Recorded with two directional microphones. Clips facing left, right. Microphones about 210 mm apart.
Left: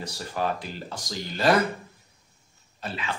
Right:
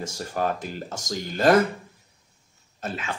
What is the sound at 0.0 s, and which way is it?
Speech, 45° right (ahead or behind).